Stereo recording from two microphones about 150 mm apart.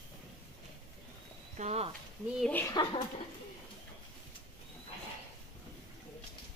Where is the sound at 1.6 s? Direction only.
50° right (ahead or behind).